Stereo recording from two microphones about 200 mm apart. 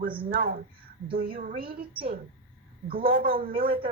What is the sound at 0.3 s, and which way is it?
A woman's voice, 45° right (ahead or behind).